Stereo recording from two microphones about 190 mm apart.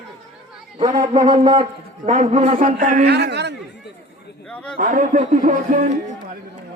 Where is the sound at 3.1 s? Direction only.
60° right (ahead or behind).